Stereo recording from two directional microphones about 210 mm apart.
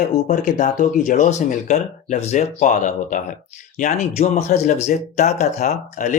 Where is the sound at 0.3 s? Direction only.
35° left (ahead or behind).